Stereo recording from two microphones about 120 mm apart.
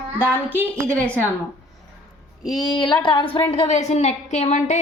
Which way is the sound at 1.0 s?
10° left (ahead or behind).